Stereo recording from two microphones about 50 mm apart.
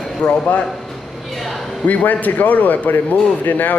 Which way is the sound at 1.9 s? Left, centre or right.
Left.